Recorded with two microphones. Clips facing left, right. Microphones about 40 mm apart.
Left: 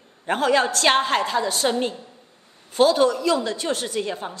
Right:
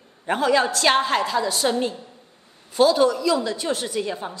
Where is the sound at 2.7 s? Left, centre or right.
Left.